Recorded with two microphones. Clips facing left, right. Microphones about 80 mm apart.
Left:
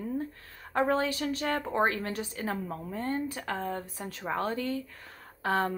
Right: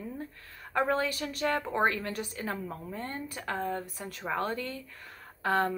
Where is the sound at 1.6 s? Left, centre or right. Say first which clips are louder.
Even; left.